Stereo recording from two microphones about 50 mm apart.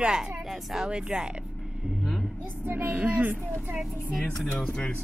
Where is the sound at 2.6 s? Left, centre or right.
Right.